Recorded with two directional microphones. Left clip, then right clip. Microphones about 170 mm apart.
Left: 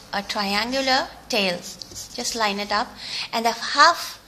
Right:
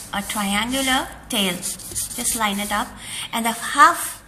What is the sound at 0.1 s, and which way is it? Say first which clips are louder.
A woman's voice: even; 55° left (ahead or behind).